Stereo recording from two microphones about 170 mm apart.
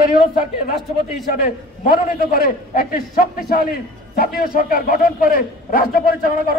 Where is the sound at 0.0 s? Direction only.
55° left (ahead or behind).